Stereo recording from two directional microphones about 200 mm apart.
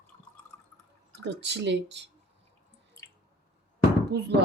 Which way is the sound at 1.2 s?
60° right (ahead or behind).